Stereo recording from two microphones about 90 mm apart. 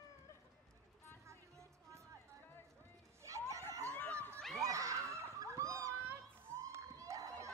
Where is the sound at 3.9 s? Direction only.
20° left (ahead or behind).